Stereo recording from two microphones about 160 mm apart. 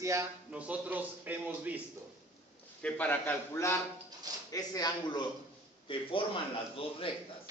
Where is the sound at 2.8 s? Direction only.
10° left (ahead or behind).